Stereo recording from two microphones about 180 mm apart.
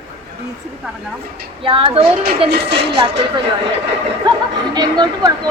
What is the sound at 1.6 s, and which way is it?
Speech, 30° right (ahead or behind).